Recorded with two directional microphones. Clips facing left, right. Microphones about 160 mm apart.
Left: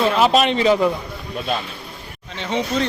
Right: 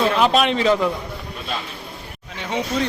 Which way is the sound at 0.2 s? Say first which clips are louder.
Left 1 dB; centre (ahead or behind).